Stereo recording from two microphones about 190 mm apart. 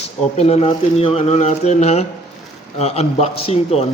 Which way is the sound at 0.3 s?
35° left (ahead or behind).